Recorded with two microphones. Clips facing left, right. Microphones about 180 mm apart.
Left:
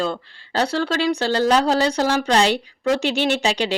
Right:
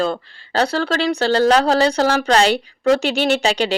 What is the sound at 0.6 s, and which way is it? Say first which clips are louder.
Speech: right 2 dB; 65° right (ahead or behind).